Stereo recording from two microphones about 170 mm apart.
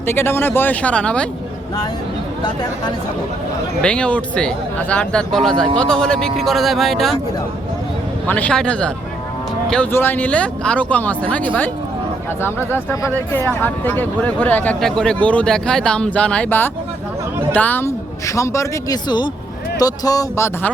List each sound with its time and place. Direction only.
0.0 s speech: 15° left (ahead or behind)
3.8 s speech: 5° left (ahead or behind)
8.3 s speech: 5° left (ahead or behind)
12.7 s speech: 15° left (ahead or behind)